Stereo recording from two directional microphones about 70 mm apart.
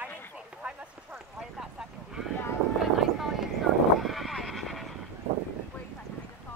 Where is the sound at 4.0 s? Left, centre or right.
Centre.